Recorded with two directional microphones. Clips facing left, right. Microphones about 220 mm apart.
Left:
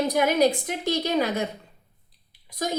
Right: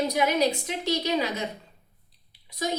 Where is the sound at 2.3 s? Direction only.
50° left (ahead or behind).